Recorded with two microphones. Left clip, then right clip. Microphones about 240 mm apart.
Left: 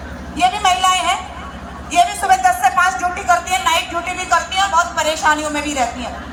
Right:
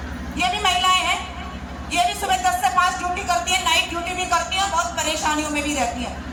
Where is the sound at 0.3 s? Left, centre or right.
Centre.